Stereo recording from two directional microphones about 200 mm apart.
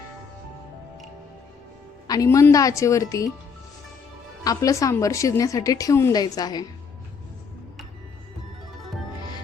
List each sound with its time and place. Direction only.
2.0 s a woman's voice: 15° left (ahead or behind)
4.4 s a woman's voice: 15° left (ahead or behind)